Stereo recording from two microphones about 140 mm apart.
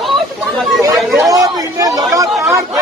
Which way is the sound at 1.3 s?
25° right (ahead or behind).